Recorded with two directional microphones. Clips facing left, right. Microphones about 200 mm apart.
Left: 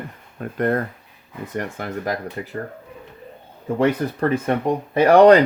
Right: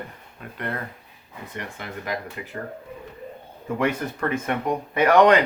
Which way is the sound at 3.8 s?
35° left (ahead or behind).